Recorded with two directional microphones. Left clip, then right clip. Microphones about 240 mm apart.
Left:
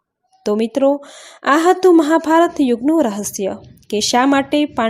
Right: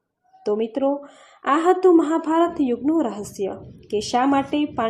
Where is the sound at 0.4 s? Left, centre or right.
Left.